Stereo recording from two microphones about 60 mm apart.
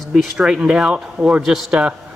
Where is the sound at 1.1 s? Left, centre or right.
Centre.